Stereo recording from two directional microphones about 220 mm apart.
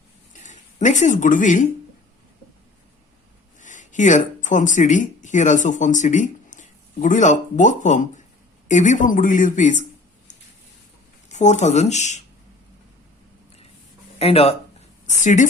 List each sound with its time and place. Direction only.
0.3 s speech: 35° left (ahead or behind)
3.6 s speech: 35° left (ahead or behind)
11.3 s speech: 35° left (ahead or behind)
14.2 s a woman's voice: 25° left (ahead or behind)